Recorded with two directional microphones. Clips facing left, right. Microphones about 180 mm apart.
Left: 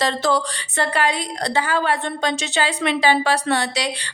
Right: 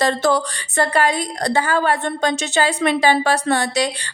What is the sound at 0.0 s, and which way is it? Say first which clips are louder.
A woman's voice: right 3 dB; 50° right (ahead or behind).